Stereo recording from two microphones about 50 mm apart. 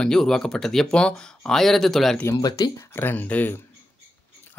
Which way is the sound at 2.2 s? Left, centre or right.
Left.